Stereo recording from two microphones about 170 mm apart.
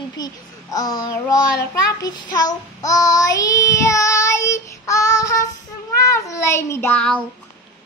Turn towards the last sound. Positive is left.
turn(degrees=5)  # may be behind; listen again after turning